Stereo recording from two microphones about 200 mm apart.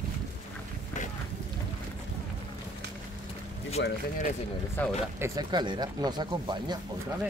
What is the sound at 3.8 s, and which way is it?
Speech, 65° left (ahead or behind).